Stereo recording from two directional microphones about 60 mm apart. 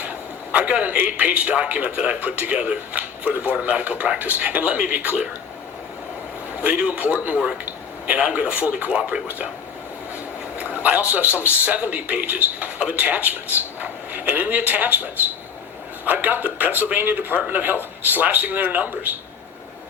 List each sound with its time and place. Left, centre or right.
0.0 s a sound: right
0.9 s speech: right
6.6 s speech: right
10.8 s speech: right